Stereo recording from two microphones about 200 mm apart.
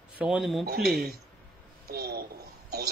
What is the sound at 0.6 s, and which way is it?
Speech, 55° right (ahead or behind).